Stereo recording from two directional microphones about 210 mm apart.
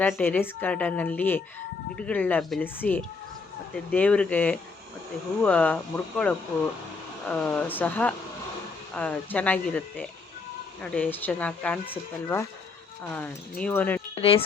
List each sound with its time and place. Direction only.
0.2 s a woman's voice: 10° left (ahead or behind)
13.1 s a woman's voice: 5° left (ahead or behind)
14.2 s speech: 25° left (ahead or behind)